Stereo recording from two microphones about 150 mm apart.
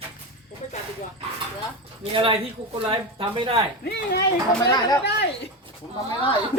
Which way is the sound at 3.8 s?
90° left.